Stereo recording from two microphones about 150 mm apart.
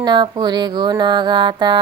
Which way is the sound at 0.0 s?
30° right (ahead or behind).